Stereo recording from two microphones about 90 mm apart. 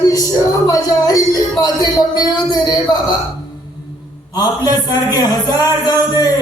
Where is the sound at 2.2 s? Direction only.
50° left (ahead or behind).